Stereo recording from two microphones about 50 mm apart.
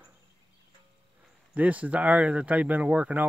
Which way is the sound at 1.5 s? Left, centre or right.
Right.